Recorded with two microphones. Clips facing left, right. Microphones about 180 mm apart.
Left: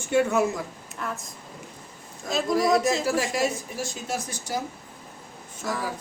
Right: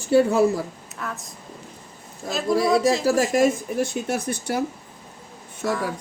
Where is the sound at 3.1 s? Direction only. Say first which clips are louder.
Right 6 dB; 45° right (ahead or behind).